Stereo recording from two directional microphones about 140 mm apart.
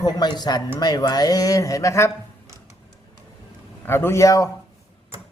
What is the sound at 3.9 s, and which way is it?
Speech, 15° left (ahead or behind).